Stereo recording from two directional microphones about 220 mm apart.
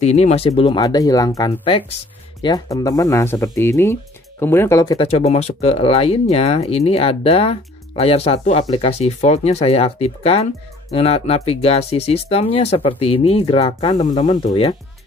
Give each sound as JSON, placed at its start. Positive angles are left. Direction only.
{"t": 0.0, "sound": "speech", "side_deg": 30}
{"t": 4.9, "sound": "speech", "side_deg": 30}